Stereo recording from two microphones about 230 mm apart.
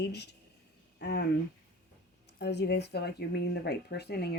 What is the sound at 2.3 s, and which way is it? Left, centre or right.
Speech, left.